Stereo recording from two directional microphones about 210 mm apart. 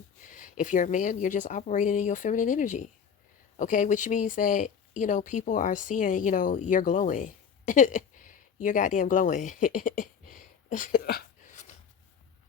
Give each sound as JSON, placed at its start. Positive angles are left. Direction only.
{"t": 0.3, "sound": "speech", "side_deg": 40}